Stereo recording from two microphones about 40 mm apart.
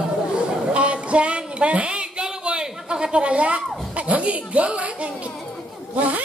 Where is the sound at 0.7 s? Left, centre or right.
Right.